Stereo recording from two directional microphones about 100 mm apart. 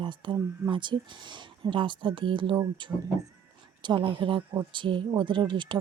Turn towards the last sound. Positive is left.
turn(degrees=-50)  # may be behind; listen again after turning